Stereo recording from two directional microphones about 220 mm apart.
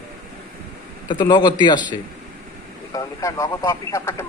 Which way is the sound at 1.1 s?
20° left (ahead or behind).